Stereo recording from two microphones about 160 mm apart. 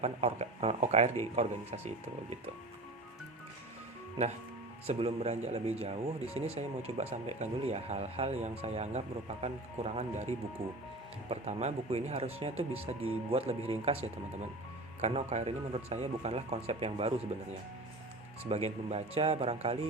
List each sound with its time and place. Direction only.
0.0 s speech: 40° right (ahead or behind)
4.9 s speech: 40° right (ahead or behind)
15.0 s speech: 45° right (ahead or behind)
18.4 s speech: 40° right (ahead or behind)